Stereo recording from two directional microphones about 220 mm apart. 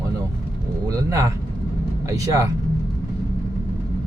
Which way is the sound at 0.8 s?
15° right (ahead or behind).